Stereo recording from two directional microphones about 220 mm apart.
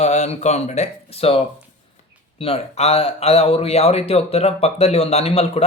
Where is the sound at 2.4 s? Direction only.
25° left (ahead or behind).